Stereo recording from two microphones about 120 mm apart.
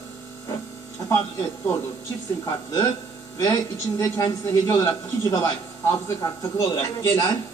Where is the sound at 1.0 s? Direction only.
35° left (ahead or behind).